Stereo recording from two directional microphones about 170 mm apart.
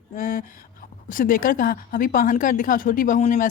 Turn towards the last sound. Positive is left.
turn(degrees=50)  # may be behind; listen again after turning